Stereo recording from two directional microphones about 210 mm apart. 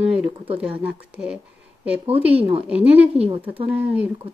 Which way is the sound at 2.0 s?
25° right (ahead or behind).